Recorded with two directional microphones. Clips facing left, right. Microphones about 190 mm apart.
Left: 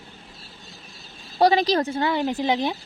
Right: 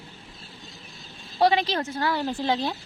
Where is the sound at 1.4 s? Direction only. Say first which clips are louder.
Left 3 dB; 40° left (ahead or behind).